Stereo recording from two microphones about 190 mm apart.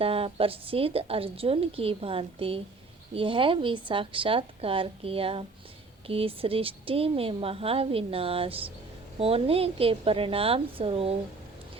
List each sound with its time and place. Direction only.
0.0 s a woman's voice: 30° right (ahead or behind)